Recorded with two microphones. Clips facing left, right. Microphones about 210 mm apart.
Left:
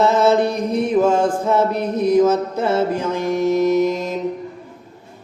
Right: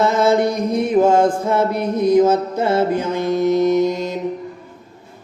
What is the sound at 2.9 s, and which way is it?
Mantra, 20° right (ahead or behind).